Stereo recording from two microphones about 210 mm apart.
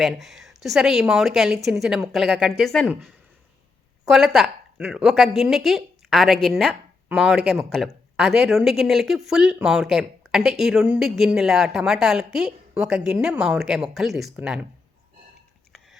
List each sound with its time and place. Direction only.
0.0 s speech: centre (ahead or behind)